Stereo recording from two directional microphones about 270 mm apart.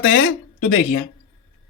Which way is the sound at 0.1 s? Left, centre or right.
Left.